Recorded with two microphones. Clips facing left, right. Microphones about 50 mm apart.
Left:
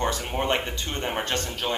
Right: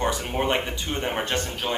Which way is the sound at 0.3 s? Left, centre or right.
Centre.